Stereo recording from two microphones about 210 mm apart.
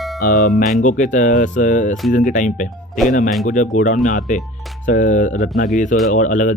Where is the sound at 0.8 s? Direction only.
35° left (ahead or behind).